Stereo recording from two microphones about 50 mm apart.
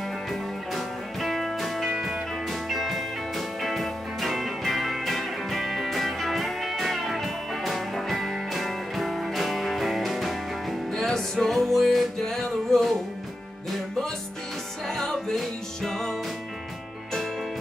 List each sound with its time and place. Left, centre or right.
0.3 s music: centre
2.0 s music: centre
2.4 s music: centre
14.9 s music: centre